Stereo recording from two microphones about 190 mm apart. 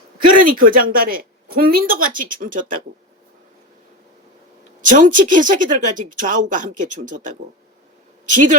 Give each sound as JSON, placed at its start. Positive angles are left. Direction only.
{"t": 0.2, "sound": "speech", "side_deg": -45}
{"t": 4.8, "sound": "speech", "side_deg": -45}